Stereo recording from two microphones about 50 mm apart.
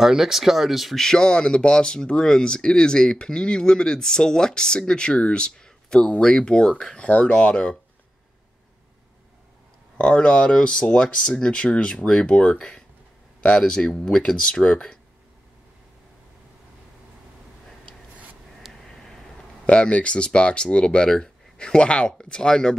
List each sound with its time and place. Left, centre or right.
0.0 s speech: centre
0.9 s speech: centre
9.9 s speech: left
18.7 s caw: centre
19.6 s speech: left